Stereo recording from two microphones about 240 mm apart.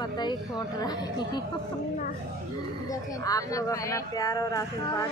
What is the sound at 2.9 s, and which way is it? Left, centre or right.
Speech, centre.